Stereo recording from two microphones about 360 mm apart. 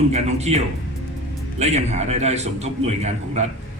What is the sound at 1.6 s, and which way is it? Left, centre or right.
A man's voice, centre.